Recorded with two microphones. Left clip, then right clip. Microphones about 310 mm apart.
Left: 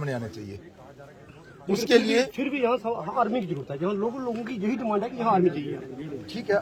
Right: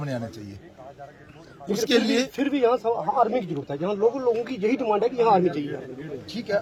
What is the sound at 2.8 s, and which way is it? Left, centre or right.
Speech, right.